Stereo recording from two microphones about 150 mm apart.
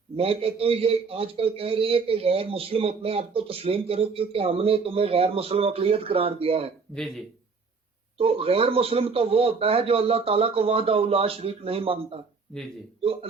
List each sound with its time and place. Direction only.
0.2 s a man's voice: 40° right (ahead or behind)
8.2 s a man's voice: 40° right (ahead or behind)